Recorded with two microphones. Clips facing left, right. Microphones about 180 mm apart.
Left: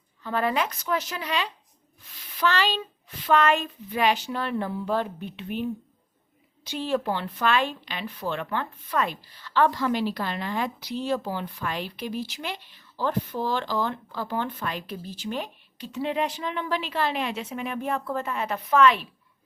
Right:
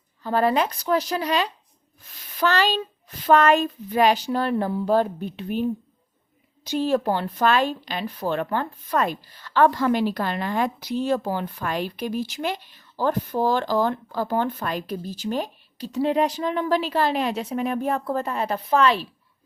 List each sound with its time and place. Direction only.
0.2 s a child's voice: 35° right (ahead or behind)
6.7 s speech: 40° right (ahead or behind)